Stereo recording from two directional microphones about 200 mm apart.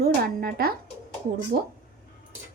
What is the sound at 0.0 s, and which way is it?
Speech, 50° right (ahead or behind).